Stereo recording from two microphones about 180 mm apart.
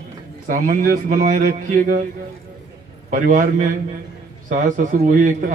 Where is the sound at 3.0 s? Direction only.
50° right (ahead or behind).